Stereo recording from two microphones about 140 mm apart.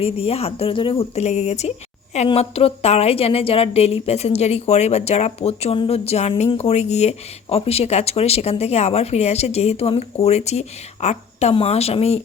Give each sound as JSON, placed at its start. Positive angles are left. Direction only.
{"t": 0.0, "sound": "speech", "side_deg": 45}